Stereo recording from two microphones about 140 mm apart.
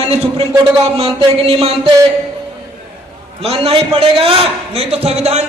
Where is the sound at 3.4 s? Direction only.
45° right (ahead or behind).